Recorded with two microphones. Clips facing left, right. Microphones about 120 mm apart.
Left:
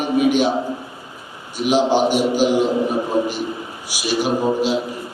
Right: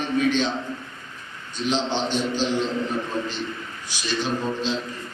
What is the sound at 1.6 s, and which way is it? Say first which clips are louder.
A man's voice: left 8 dB; 10° left (ahead or behind).